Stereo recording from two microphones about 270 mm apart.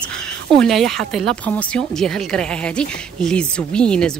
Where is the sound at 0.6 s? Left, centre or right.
Centre.